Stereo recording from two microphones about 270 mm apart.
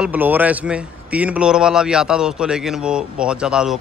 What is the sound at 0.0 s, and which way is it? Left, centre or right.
A man's voice, centre.